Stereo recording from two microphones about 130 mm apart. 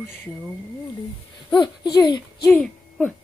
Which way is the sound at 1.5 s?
35° left (ahead or behind).